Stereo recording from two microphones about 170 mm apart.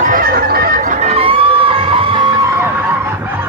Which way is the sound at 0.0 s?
55° right (ahead or behind).